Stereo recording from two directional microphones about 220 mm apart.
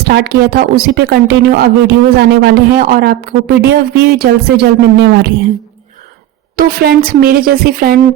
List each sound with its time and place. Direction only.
0.0 s speech: 45° right (ahead or behind)
6.6 s speech: 40° right (ahead or behind)